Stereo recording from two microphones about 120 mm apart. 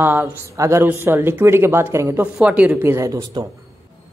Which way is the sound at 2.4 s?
10° right (ahead or behind).